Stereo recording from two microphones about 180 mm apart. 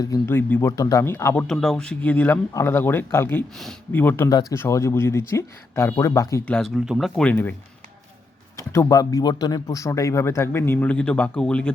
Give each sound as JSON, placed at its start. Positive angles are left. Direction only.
{"t": 0.0, "sound": "speech", "side_deg": 15}
{"t": 4.3, "sound": "speech", "side_deg": 20}
{"t": 8.7, "sound": "speech", "side_deg": 15}